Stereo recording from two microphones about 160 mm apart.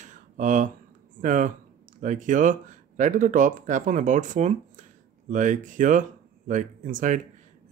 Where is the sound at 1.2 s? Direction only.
55° right (ahead or behind).